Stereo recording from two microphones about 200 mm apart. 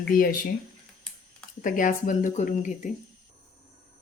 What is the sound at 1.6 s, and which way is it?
Speech, 40° left (ahead or behind).